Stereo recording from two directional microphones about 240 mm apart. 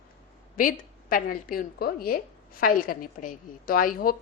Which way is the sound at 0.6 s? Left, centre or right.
Left.